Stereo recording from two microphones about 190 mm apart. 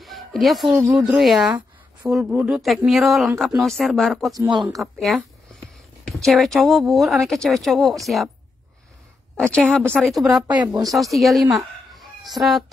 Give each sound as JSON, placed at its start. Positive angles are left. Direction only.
{"t": 0.0, "sound": "speech", "side_deg": 0}
{"t": 4.3, "sound": "speech", "side_deg": -20}
{"t": 4.7, "sound": "speech", "side_deg": 0}
{"t": 9.4, "sound": "speech", "side_deg": 5}
{"t": 10.4, "sound": "speech", "side_deg": -20}
{"t": 10.9, "sound": "speech", "side_deg": 0}
{"t": 11.5, "sound": "chicken", "side_deg": 0}